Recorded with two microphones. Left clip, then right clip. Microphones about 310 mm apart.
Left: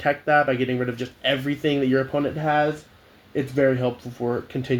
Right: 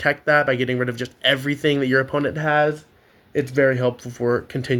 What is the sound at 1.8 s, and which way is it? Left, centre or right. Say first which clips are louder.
Speech: right 3 dB; right.